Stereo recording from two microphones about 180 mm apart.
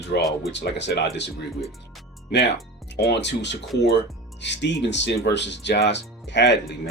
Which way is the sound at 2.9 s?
70° left (ahead or behind).